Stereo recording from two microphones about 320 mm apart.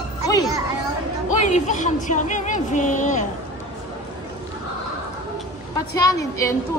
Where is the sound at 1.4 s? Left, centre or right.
Left.